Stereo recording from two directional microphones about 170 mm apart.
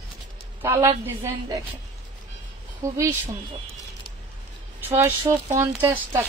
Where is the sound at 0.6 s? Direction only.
15° right (ahead or behind).